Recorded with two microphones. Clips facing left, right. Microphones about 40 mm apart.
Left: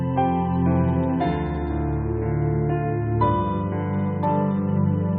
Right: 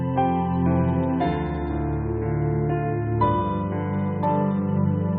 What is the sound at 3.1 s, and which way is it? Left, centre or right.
Music, centre.